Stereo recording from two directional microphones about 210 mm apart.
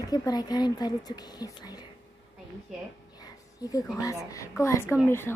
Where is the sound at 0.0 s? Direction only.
20° left (ahead or behind).